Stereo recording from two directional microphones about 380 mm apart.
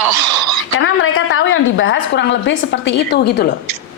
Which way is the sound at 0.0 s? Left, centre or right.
Right.